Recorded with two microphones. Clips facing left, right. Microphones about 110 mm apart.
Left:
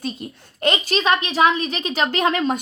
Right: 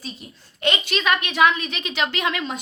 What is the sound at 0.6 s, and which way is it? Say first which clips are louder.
A woman's voice: left 3 dB; 35° left (ahead or behind).